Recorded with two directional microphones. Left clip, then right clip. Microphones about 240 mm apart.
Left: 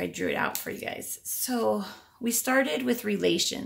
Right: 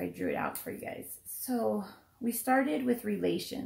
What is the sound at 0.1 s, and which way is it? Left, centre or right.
Speech, left.